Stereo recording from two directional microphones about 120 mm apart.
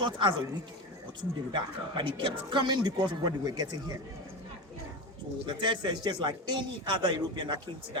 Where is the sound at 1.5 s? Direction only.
40° right (ahead or behind).